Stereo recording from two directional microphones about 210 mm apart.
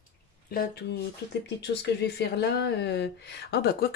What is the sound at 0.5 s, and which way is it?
Speech, 50° left (ahead or behind).